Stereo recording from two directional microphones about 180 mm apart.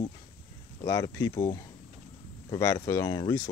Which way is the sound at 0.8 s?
15° left (ahead or behind).